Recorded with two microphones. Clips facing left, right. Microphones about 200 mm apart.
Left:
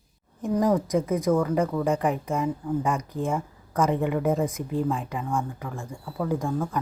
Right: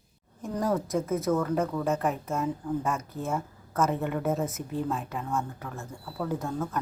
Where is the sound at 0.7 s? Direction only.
15° left (ahead or behind).